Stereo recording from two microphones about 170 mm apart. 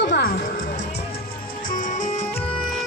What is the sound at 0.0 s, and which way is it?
Music, 80° left.